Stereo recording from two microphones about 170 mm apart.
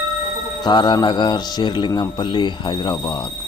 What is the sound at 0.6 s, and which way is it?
Speech, 25° left (ahead or behind).